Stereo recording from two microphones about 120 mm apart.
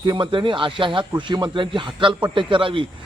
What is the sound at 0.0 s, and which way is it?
A man's voice, 40° right (ahead or behind).